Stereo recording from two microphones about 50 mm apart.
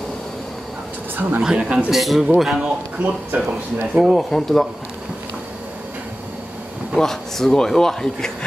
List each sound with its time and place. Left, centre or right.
1.4 s speech: centre
1.9 s a man's voice: centre
2.5 s speech: right
4.0 s a man's voice: centre
7.0 s speech: centre